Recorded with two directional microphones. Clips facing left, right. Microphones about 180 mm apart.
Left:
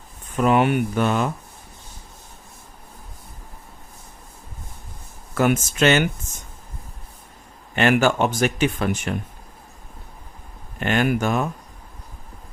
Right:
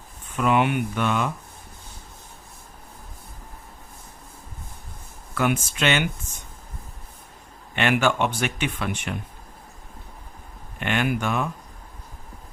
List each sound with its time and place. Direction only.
0.3 s speech: 40° left (ahead or behind)
5.3 s speech: 40° left (ahead or behind)
7.8 s speech: 40° left (ahead or behind)
10.8 s speech: 40° left (ahead or behind)